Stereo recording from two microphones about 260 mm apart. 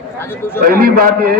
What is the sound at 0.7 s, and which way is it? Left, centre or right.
Speech, right.